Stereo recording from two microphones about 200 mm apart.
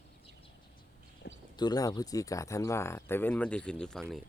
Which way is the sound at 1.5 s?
20° left (ahead or behind).